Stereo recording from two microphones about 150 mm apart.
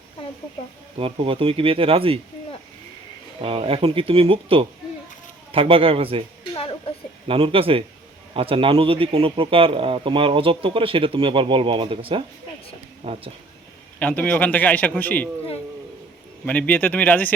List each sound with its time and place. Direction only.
0.9 s a man's voice: 35° right (ahead or behind)
3.4 s a man's voice: 40° right (ahead or behind)
6.5 s a sound: 35° left (ahead or behind)
7.3 s a man's voice: 35° right (ahead or behind)
14.0 s a man's voice: 10° left (ahead or behind)
16.5 s a man's voice: 10° left (ahead or behind)